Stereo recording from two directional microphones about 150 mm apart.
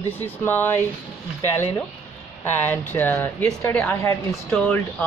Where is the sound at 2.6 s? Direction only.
10° left (ahead or behind).